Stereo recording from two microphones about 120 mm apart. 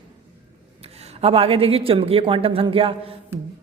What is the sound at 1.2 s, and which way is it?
A man's voice, 55° right (ahead or behind).